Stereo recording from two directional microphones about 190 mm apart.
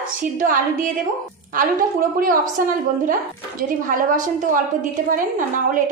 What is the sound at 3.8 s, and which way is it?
Speech, 45° right (ahead or behind).